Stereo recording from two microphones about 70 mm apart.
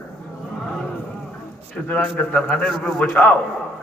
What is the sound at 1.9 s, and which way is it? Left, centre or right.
A man's voice, centre.